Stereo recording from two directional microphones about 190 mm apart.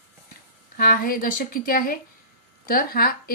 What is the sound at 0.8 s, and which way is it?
Speech, 50° left (ahead or behind).